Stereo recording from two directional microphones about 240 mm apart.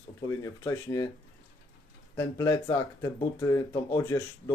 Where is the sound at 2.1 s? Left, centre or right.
Centre.